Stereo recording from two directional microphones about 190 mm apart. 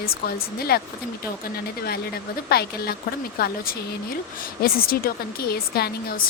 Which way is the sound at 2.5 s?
55° left (ahead or behind).